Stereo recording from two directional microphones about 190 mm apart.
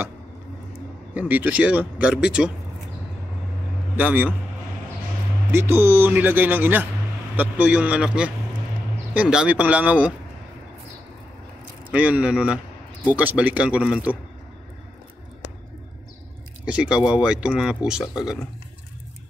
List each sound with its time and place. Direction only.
1.1 s speech: 10° right (ahead or behind)
3.9 s a man's voice: 10° right (ahead or behind)
5.5 s speech: 15° right (ahead or behind)
11.9 s speech: 5° right (ahead or behind)
16.6 s speech: 5° right (ahead or behind)